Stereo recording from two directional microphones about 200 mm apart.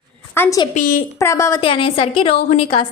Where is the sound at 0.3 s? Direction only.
15° left (ahead or behind).